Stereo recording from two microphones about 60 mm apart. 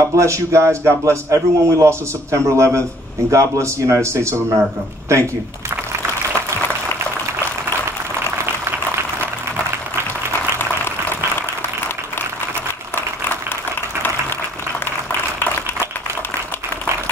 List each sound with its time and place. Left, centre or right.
0.0 s a man's voice: right